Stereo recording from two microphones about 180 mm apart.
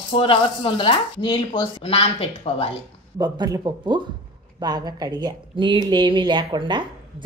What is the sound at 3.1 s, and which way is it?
Speech, 20° right (ahead or behind).